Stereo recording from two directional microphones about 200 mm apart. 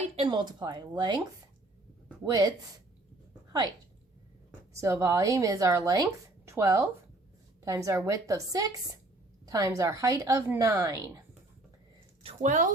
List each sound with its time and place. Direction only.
0.2 s speech: 25° right (ahead or behind)
4.7 s speech: 15° right (ahead or behind)
12.2 s speech: 35° right (ahead or behind)